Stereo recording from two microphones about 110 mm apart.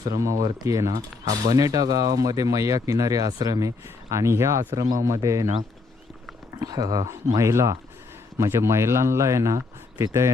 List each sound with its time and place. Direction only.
0.1 s speech: 30° right (ahead or behind)
6.6 s speech: 35° right (ahead or behind)